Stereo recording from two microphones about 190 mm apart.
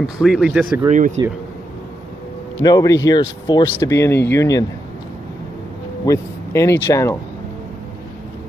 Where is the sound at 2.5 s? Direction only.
20° left (ahead or behind).